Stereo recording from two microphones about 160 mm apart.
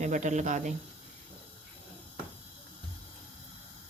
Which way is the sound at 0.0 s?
50° right (ahead or behind).